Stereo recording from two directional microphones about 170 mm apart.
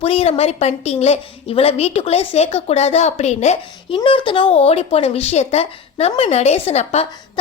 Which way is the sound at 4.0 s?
30° left (ahead or behind).